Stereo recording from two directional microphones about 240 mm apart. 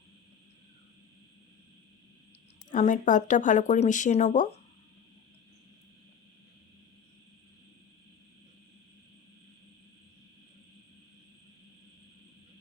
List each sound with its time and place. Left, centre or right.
2.6 s speech: left